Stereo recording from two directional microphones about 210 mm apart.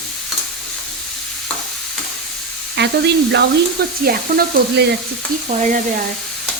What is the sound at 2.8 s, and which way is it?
Speech, 55° right (ahead or behind).